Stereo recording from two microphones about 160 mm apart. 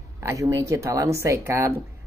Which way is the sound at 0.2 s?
20° right (ahead or behind).